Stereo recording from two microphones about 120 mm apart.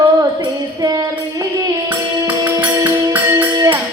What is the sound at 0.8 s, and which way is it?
Music, 35° right (ahead or behind).